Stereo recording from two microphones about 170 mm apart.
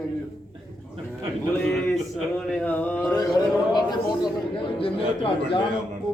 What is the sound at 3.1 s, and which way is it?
A man's voice, 20° left (ahead or behind).